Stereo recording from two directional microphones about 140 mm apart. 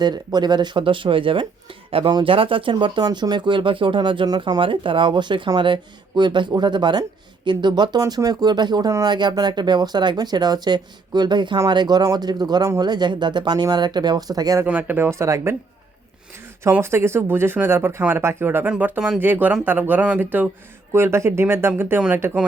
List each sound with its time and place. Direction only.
0.0 s speech: 30° right (ahead or behind)
14.6 s speech: 15° right (ahead or behind)
16.6 s speech: 20° right (ahead or behind)